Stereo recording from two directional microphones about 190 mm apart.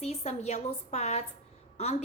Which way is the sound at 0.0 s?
35° left (ahead or behind).